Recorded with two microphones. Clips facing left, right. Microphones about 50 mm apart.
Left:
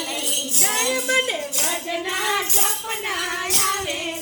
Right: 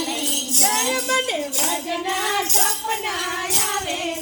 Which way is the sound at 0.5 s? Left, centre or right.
Left.